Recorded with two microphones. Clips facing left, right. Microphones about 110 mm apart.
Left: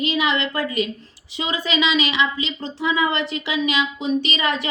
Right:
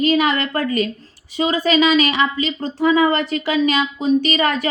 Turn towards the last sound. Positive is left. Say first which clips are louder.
# right 5 dB
turn(degrees=-45)  # may be behind; listen again after turning